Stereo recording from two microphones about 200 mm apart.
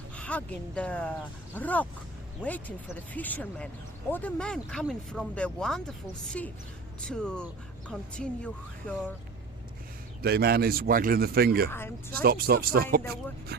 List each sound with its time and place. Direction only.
0.2 s speech: 5° left (ahead or behind)
7.0 s speech: 5° left (ahead or behind)
10.2 s a man's voice: 50° right (ahead or behind)
11.7 s speech: 10° left (ahead or behind)
12.1 s a man's voice: 50° right (ahead or behind)